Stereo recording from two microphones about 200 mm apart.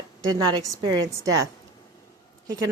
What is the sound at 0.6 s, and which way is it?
Speech, 15° right (ahead or behind).